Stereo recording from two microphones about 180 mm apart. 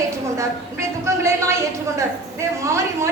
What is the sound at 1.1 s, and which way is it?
A woman's voice, 15° right (ahead or behind).